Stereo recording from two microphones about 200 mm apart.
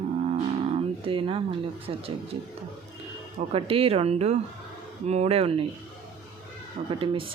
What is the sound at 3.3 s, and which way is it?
Speech, 30° right (ahead or behind).